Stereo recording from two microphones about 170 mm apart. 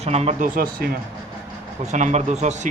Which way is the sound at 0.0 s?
40° right (ahead or behind).